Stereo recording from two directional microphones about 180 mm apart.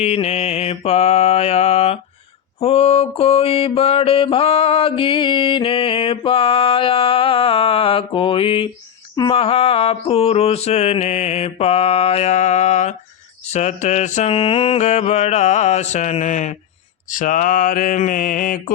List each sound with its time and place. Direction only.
0.0 s mantra: 35° left (ahead or behind)